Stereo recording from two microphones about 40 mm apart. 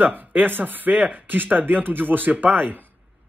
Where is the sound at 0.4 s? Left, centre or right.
Right.